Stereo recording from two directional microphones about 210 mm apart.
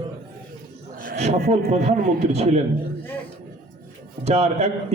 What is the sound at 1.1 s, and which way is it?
A man's voice, 30° right (ahead or behind).